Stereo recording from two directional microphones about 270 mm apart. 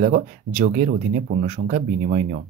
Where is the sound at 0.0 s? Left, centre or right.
Right.